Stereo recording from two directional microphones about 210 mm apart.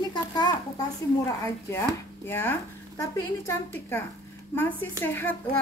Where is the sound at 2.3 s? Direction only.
10° left (ahead or behind).